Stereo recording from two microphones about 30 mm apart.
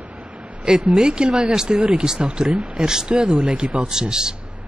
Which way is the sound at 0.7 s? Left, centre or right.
Centre.